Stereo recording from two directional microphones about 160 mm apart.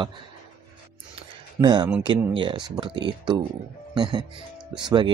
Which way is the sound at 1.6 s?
25° right (ahead or behind).